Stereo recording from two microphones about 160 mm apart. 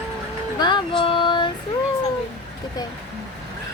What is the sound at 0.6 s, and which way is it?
Speech, 30° left (ahead or behind).